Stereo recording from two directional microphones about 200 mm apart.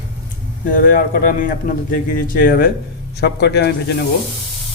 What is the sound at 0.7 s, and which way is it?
Speech, 45° left (ahead or behind).